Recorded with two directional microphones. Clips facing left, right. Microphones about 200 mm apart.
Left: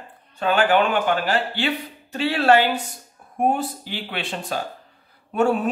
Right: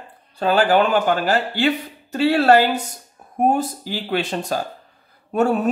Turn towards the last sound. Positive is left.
turn(degrees=-45)  # may be behind; listen again after turning